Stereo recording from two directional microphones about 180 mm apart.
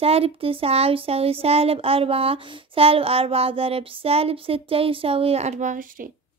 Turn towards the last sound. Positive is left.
turn(degrees=-45)  # may be behind; listen again after turning